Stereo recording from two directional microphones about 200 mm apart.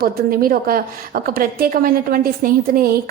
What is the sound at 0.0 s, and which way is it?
A woman's voice, 45° right (ahead or behind).